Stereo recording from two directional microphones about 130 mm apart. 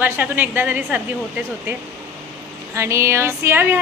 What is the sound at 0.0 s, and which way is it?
A woman's voice, 15° right (ahead or behind).